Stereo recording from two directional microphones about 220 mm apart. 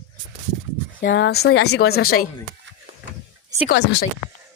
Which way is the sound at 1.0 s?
55° left (ahead or behind).